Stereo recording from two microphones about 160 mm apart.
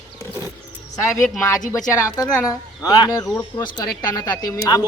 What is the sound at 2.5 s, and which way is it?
A man's voice, 20° left (ahead or behind).